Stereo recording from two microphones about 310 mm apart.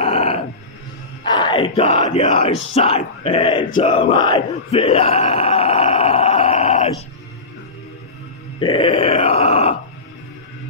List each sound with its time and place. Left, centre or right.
0.0 s a sound: centre
1.2 s speech: centre
8.5 s groan: centre